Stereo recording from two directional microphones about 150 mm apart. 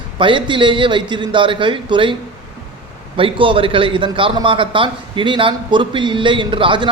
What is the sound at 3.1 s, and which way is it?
Speech, 35° right (ahead or behind).